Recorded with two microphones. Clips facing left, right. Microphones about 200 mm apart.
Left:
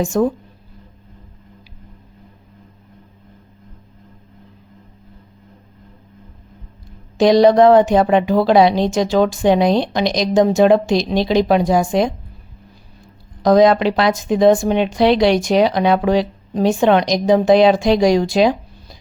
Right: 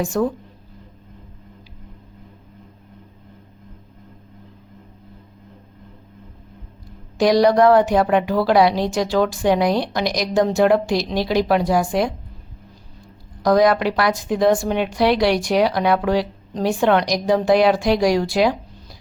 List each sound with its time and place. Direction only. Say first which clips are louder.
0.0 s a woman's voice: left 4 dB; 20° left (ahead or behind)
7.2 s a woman's voice: left 4 dB; 20° left (ahead or behind)
13.4 s a woman's voice: left 4 dB; 20° left (ahead or behind)